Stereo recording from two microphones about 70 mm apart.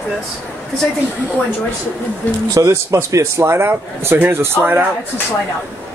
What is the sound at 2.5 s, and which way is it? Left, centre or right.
A man's voice, right.